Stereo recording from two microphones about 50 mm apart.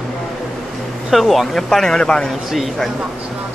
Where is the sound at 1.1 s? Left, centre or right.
Centre.